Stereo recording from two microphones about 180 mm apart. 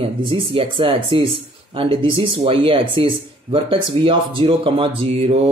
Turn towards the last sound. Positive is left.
turn(degrees=-35)  # may be behind; listen again after turning